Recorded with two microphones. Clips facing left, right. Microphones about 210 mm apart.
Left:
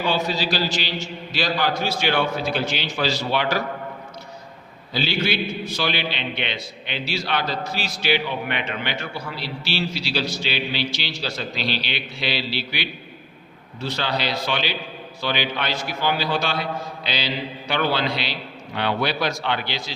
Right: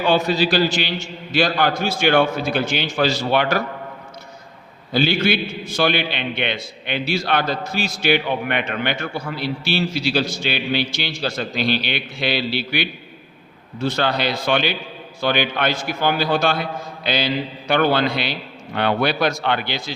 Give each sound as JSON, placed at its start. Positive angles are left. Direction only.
{"t": 0.1, "sound": "a man's voice", "side_deg": -55}
{"t": 4.9, "sound": "a man's voice", "side_deg": -50}